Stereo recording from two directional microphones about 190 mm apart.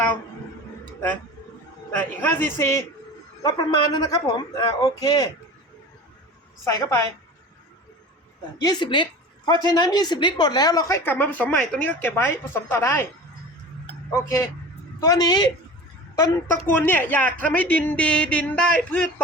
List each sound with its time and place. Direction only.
1.9 s a woman's voice: 10° left (ahead or behind)
6.7 s a man's voice: 20° left (ahead or behind)
8.6 s a man's voice: 25° left (ahead or behind)
15.0 s a man's voice: 20° left (ahead or behind)